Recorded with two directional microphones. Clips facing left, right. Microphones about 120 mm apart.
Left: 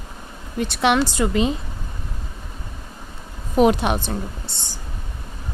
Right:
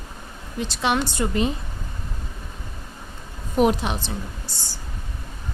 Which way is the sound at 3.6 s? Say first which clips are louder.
Left 3 dB; 75° left (ahead or behind).